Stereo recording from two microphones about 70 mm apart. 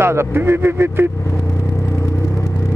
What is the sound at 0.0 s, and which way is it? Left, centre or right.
Speech, right.